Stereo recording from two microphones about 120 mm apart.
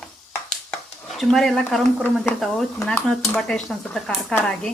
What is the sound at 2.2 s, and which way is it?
Speech, centre (ahead or behind).